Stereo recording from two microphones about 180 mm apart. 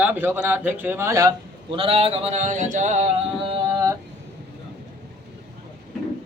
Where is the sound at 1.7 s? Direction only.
30° right (ahead or behind).